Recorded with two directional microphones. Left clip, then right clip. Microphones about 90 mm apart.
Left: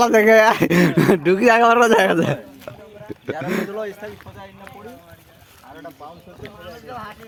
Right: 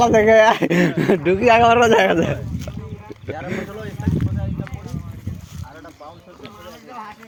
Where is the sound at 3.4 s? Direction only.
65° left (ahead or behind).